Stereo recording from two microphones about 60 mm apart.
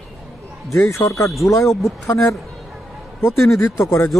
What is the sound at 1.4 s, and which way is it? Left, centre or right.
Speech, left.